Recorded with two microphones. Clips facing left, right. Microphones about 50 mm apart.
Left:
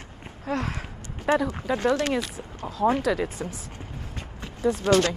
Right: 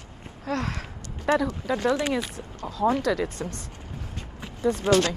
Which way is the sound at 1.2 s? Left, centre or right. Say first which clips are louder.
Even; centre.